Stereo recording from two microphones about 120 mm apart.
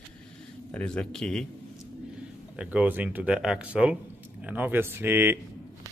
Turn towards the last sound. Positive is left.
turn(degrees=-20)  # may be behind; listen again after turning